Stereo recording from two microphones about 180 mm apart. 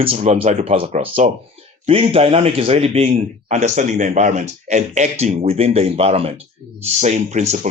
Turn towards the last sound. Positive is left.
turn(degrees=-40)  # may be behind; listen again after turning